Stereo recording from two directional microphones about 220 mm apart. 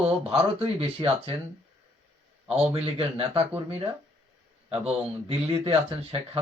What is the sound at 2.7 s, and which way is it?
Speech, 25° right (ahead or behind).